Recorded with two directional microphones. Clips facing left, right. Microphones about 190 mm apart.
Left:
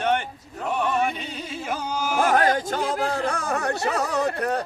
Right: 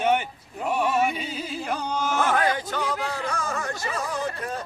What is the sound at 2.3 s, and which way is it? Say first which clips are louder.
Speech: left 3 dB; 45° left (ahead or behind).